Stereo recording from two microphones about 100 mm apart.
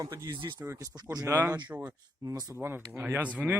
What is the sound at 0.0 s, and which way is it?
A man's voice, 30° right (ahead or behind).